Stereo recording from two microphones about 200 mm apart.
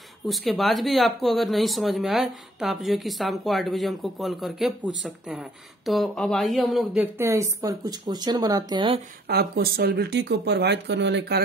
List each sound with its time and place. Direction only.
0.3 s speech: centre (ahead or behind); by 9.0 s 25° right (ahead or behind)
9.3 s speech: 50° right (ahead or behind)